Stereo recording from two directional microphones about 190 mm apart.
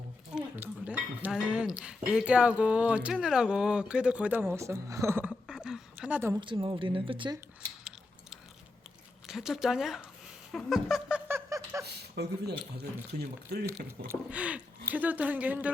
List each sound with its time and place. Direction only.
0.3 s speech: 10° right (ahead or behind)
5.3 s a sound: 5° right (ahead or behind)
6.4 s speech: 25° right (ahead or behind)
9.2 s speech: 5° right (ahead or behind)
10.5 s a sound: centre (ahead or behind); by 11.9 s 15° right (ahead or behind)
11.9 s speech: 60° right (ahead or behind)
14.1 s speech: 5° right (ahead or behind)